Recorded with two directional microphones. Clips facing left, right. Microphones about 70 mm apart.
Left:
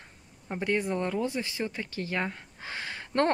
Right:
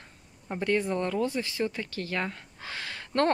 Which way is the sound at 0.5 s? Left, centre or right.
Centre.